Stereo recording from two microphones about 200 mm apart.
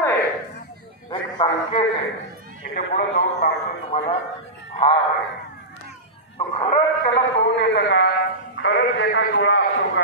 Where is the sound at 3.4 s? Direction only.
30° left (ahead or behind).